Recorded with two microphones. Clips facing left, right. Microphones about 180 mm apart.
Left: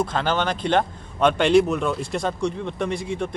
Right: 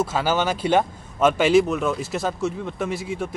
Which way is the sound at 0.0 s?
5° right (ahead or behind).